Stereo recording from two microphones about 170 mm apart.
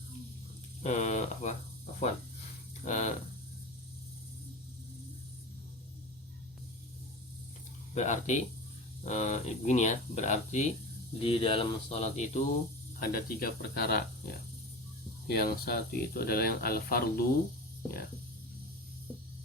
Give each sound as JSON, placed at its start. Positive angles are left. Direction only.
{"t": 0.8, "sound": "speech", "side_deg": 45}
{"t": 2.8, "sound": "speech", "side_deg": 45}
{"t": 7.9, "sound": "speech", "side_deg": 45}
{"t": 11.2, "sound": "speech", "side_deg": 35}
{"t": 13.1, "sound": "speech", "side_deg": 55}